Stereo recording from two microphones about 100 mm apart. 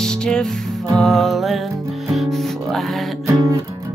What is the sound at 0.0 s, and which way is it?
Music, 5° left (ahead or behind).